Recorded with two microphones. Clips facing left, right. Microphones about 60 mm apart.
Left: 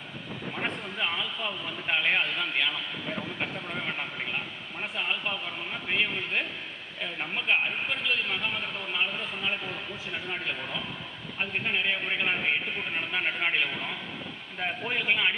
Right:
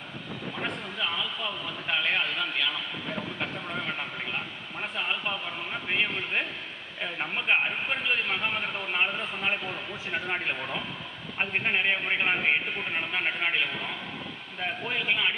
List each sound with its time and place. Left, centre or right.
0.9 s a sound: left
4.9 s a sound: centre
5.9 s a man's voice: centre; by 10.8 s right
11.3 s a man's voice: right
13.2 s a man's voice: centre
14.6 s a man's voice: centre